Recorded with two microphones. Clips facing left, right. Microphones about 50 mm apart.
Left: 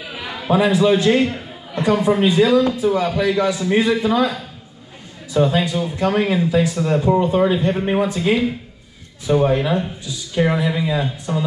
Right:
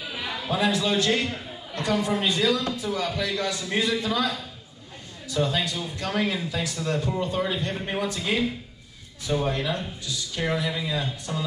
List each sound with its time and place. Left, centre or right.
0.1 s a man's voice: left